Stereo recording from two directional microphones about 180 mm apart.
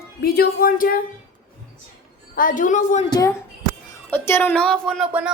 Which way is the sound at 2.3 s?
50° left (ahead or behind).